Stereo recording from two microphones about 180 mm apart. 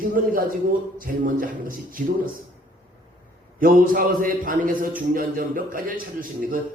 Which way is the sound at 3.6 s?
50° right (ahead or behind).